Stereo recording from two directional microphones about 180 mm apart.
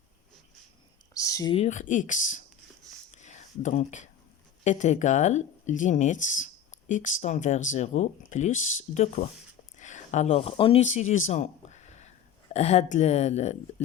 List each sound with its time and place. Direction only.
1.1 s whispering: 20° left (ahead or behind)
1.5 s speech: 40° left (ahead or behind)
3.2 s a sound: 40° left (ahead or behind)
4.6 s speech: 40° left (ahead or behind)
11.3 s a sound: 40° left (ahead or behind)
12.5 s speech: 35° left (ahead or behind)